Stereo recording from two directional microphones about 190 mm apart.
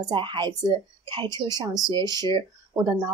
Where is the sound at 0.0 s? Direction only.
25° right (ahead or behind).